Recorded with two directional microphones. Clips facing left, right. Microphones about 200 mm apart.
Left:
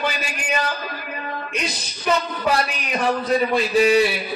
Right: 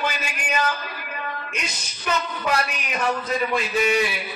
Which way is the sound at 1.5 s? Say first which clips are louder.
Left 6 dB; 35° left (ahead or behind).